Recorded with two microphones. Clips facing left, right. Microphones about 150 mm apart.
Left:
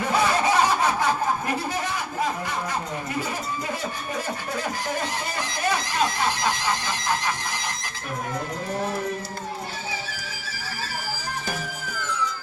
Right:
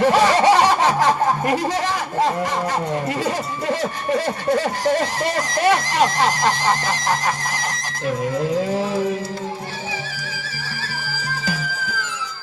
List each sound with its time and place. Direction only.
0.0 s music: 90° right
3.7 s a sound: 85° right
6.8 s music: 40° right (ahead or behind)